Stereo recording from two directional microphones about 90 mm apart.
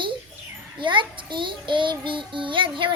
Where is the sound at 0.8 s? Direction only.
65° right (ahead or behind).